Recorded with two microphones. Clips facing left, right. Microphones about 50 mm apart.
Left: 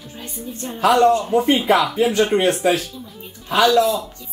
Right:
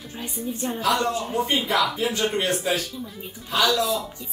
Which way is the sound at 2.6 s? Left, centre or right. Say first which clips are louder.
Left 8 dB; left.